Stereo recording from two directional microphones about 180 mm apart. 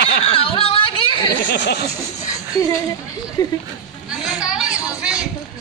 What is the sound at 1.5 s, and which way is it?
Speech, 70° left (ahead or behind).